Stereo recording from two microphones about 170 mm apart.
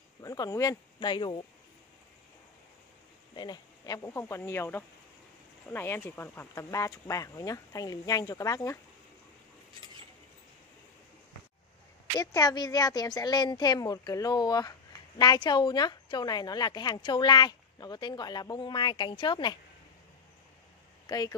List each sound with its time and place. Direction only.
0.2 s speech: 20° left (ahead or behind)
3.3 s speech: 25° left (ahead or behind)
12.2 s speech: 20° left (ahead or behind)